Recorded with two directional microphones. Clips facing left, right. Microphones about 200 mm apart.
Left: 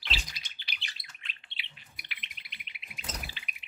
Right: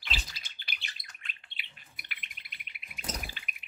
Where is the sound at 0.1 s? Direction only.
50° right (ahead or behind).